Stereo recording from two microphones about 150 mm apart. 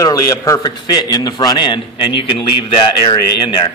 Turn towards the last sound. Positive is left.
turn(degrees=30)  # may be behind; listen again after turning